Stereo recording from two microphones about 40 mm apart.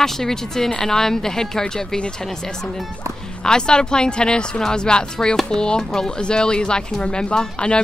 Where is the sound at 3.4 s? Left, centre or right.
Left.